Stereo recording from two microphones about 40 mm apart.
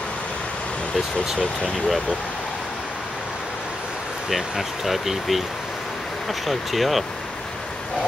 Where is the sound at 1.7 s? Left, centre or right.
Centre.